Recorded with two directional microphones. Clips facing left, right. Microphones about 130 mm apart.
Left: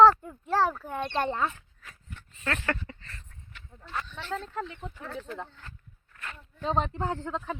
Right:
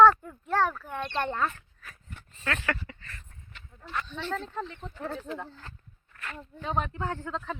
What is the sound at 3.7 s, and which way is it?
Speech, 30° left (ahead or behind).